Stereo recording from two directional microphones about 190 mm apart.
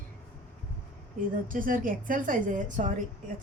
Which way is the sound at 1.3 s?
45° right (ahead or behind).